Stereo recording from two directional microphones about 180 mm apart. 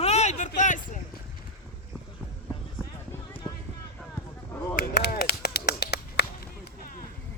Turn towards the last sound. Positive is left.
turn(degrees=60)  # may be behind; listen again after turning